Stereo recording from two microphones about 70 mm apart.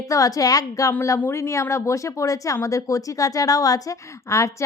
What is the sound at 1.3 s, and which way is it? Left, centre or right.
A woman's voice, left.